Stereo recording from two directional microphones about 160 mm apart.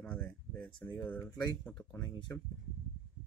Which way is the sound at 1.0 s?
10° left (ahead or behind).